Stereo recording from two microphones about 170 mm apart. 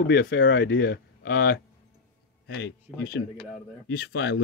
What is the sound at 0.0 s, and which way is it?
Speech, 90° left.